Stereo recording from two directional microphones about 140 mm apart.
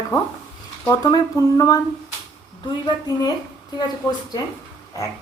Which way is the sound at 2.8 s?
30° left (ahead or behind).